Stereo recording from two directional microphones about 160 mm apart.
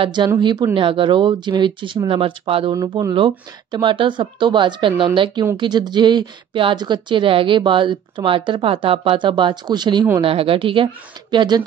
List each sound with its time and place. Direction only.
0.0 s speech: 30° right (ahead or behind)
2.7 s speech: 25° right (ahead or behind)